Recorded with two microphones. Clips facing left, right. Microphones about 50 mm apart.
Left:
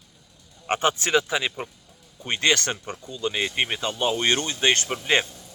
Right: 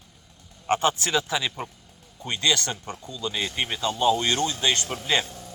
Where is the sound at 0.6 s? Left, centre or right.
Left.